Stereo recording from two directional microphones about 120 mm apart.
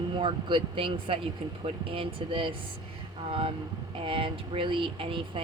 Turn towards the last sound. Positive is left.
turn(degrees=-45)  # may be behind; listen again after turning